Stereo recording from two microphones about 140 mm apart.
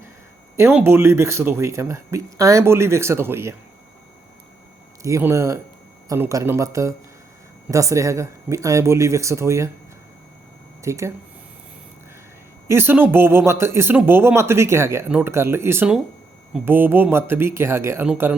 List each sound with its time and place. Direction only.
0.5 s speech: 15° right (ahead or behind)
5.0 s speech: 20° right (ahead or behind)
10.8 s speech: 20° right (ahead or behind)
12.6 s a man's voice: 15° right (ahead or behind)